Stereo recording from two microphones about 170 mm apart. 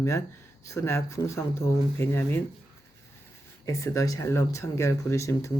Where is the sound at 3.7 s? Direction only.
20° left (ahead or behind).